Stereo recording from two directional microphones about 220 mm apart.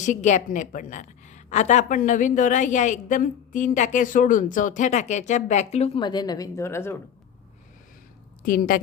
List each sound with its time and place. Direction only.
0.0 s a woman's voice: 35° left (ahead or behind); by 6.9 s 10° left (ahead or behind)
8.4 s a woman's voice: 40° left (ahead or behind)